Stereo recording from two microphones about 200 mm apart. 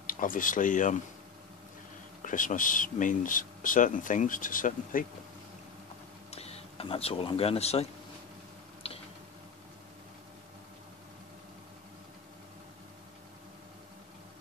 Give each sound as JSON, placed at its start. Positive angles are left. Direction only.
{"t": 0.0, "sound": "speech", "side_deg": 45}
{"t": 2.2, "sound": "speech", "side_deg": 40}
{"t": 6.3, "sound": "speech", "side_deg": 30}
{"t": 8.8, "sound": "tick-tock", "side_deg": 30}